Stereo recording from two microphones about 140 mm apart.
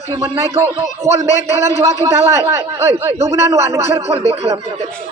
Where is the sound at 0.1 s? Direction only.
20° right (ahead or behind).